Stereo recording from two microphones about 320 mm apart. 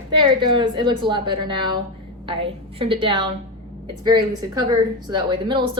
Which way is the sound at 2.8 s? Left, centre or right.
Centre.